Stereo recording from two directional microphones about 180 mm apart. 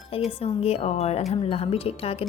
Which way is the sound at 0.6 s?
35° left (ahead or behind).